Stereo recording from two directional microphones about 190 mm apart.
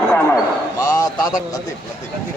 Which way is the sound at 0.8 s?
20° left (ahead or behind).